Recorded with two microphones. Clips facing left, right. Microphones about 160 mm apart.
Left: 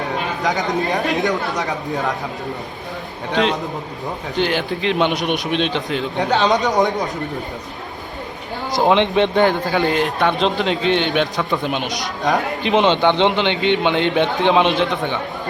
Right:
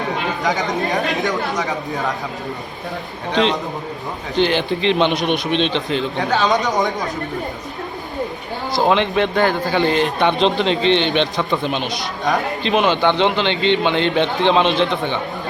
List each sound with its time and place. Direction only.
0.4 s a man's voice: centre (ahead or behind)
4.4 s a man's voice: 5° left (ahead or behind)
8.7 s speech: 20° left (ahead or behind)
9.6 s a man's voice: 5° left (ahead or behind)